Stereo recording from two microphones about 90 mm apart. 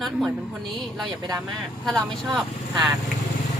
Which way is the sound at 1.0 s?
50° right (ahead or behind).